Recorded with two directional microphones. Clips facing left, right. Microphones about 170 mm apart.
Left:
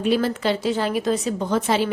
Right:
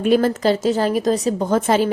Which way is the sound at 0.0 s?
50° right (ahead or behind).